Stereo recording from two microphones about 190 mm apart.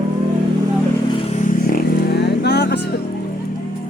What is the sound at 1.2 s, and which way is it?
Vehicle, 40° left (ahead or behind).